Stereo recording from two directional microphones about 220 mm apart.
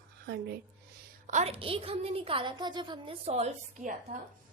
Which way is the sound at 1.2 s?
30° right (ahead or behind).